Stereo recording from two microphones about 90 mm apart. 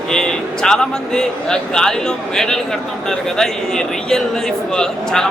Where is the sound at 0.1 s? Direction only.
10° left (ahead or behind).